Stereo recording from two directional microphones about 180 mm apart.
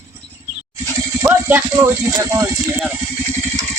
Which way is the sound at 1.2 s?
15° right (ahead or behind).